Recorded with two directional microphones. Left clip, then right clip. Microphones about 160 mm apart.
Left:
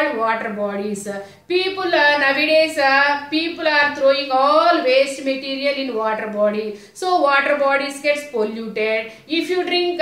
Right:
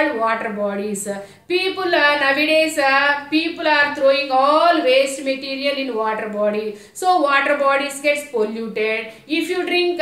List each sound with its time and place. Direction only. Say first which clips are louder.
0.2 s speech: even; 20° right (ahead or behind)